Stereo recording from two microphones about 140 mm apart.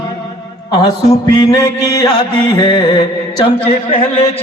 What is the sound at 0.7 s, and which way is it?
Music, 30° left (ahead or behind).